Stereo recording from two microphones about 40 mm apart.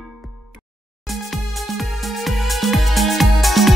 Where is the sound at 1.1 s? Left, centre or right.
Centre.